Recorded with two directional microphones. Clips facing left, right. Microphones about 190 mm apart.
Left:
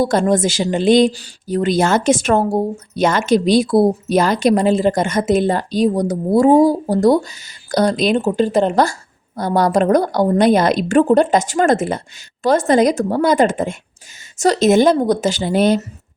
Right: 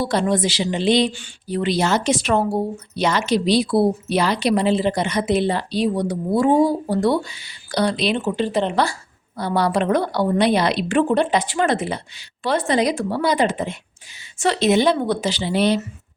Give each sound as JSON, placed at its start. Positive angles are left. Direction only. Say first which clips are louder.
{"t": 0.0, "sound": "speech", "louder": "left 5 dB", "side_deg": 45}